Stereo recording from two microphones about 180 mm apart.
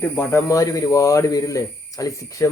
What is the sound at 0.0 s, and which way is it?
Speech, 15° left (ahead or behind).